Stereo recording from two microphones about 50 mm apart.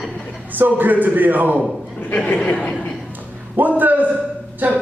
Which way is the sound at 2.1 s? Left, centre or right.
Left.